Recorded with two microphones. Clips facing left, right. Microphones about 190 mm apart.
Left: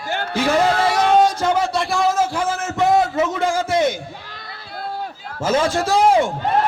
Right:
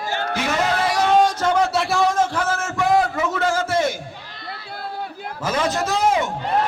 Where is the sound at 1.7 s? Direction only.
Centre (ahead or behind); by 4.0 s 20° left (ahead or behind).